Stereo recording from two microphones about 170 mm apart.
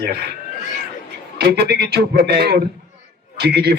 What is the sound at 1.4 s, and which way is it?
Speech, 70° right (ahead or behind).